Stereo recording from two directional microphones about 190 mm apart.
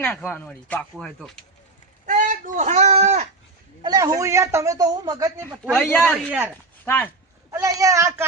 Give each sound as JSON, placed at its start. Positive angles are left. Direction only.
{"t": 0.0, "sound": "speech", "side_deg": 5}
{"t": 2.0, "sound": "speech", "side_deg": -45}
{"t": 3.8, "sound": "a man's voice", "side_deg": -15}
{"t": 5.7, "sound": "speech", "side_deg": 5}
{"t": 7.5, "sound": "a man's voice", "side_deg": -15}